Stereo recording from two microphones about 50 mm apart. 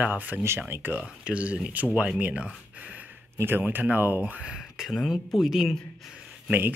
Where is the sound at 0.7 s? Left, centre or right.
Right.